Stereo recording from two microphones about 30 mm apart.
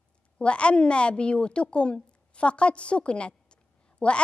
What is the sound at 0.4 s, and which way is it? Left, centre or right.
A woman's voice, left.